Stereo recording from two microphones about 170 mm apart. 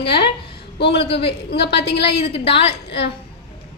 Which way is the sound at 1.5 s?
75° left (ahead or behind).